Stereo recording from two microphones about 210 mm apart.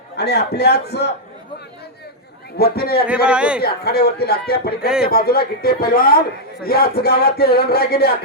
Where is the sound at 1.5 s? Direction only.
50° left (ahead or behind).